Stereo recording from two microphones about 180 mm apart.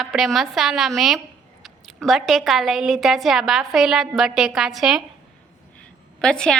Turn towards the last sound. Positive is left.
turn(degrees=5)  # may be behind; listen again after turning